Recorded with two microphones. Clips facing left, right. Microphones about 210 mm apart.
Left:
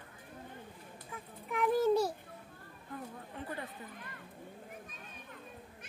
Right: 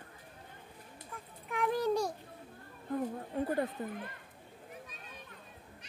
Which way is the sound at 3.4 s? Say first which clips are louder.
Right 10 dB; 40° right (ahead or behind).